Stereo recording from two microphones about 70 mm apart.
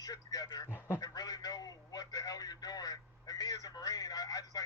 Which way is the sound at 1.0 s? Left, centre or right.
Left.